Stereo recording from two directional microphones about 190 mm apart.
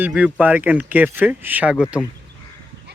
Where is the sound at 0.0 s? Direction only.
5° right (ahead or behind).